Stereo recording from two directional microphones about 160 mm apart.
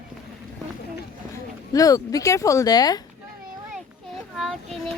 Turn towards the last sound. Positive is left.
turn(degrees=0)  # may be behind; listen again after turning